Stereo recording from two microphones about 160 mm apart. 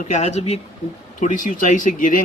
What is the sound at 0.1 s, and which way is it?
Speech, 45° left (ahead or behind).